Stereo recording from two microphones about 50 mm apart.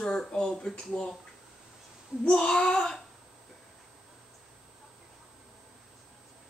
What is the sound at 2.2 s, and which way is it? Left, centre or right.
Speech, centre.